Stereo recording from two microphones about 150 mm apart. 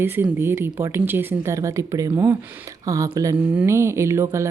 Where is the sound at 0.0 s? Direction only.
15° right (ahead or behind).